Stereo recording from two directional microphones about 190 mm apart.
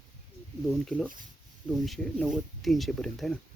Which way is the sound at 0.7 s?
Centre (ahead or behind).